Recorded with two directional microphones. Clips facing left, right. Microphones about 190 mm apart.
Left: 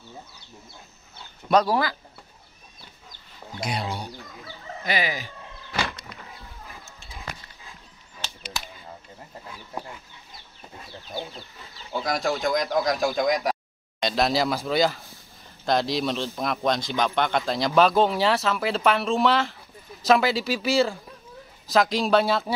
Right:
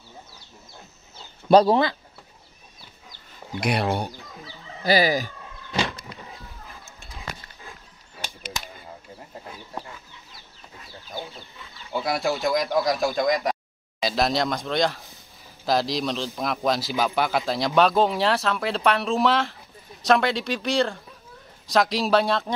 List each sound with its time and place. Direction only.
1.5 s speech: 25° right (ahead or behind)
3.6 s speech: 60° right (ahead or behind)
4.8 s speech: 35° right (ahead or behind)
5.7 s vehicle: 25° right (ahead or behind)
8.2 s a sound: 10° right (ahead or behind)
11.9 s speech: 5° right (ahead or behind)